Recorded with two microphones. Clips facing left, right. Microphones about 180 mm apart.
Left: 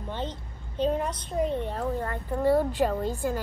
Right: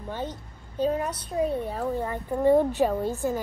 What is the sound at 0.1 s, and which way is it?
A woman's voice, 10° right (ahead or behind).